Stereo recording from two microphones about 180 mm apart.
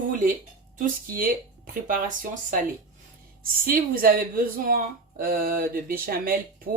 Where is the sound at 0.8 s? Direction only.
50° right (ahead or behind).